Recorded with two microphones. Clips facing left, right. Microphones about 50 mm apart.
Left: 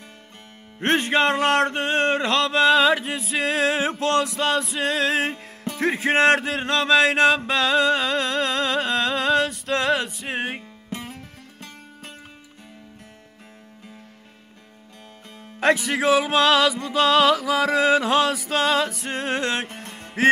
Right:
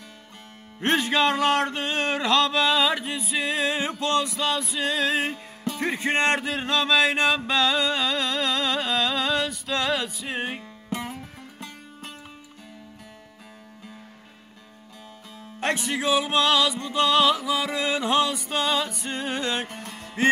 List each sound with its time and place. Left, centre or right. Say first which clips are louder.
0.7 s music: left 2 dB; left
4.0 s speech: left 2 dB; left
5.3 s music: even; left
5.8 s speech: left 5 dB; left
10.9 s music: right 3 dB; centre
15.9 s music: left 4 dB; left
19.7 s music: even; left